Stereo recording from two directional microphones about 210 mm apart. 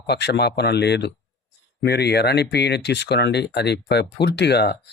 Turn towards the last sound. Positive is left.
turn(degrees=50)  # may be behind; listen again after turning